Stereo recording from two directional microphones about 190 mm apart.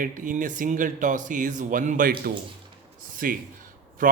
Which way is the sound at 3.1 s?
45° right (ahead or behind).